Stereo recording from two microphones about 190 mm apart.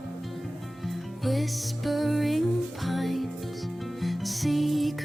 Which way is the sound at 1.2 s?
Centre (ahead or behind).